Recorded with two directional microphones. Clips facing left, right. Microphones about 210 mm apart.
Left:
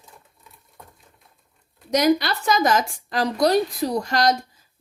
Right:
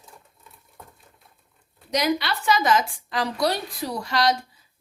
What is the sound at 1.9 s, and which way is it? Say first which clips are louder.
A woman's voice: left 5 dB; 45° left (ahead or behind).